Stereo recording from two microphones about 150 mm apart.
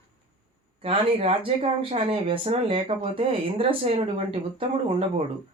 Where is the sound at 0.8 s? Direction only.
40° right (ahead or behind).